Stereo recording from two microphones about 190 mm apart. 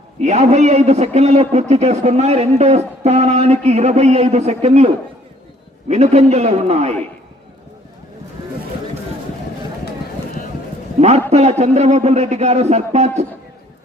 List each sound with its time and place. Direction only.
0.2 s a man's voice: 35° right (ahead or behind)
5.9 s a man's voice: 35° right (ahead or behind)
11.3 s a man's voice: 35° right (ahead or behind)